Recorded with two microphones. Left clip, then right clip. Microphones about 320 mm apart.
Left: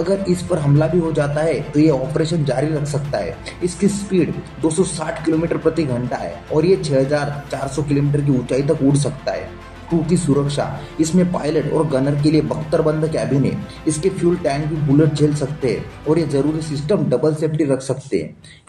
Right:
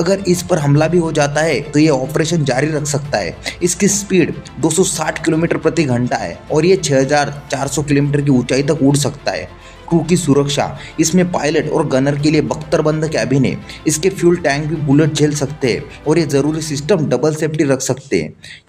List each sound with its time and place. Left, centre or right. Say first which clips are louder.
0.3 s speech: right 4 dB; right